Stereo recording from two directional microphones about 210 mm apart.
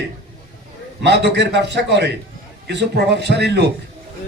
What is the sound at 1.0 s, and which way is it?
A man's voice, 55° right (ahead or behind).